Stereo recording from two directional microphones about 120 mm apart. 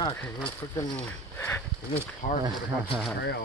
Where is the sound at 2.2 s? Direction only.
90° left.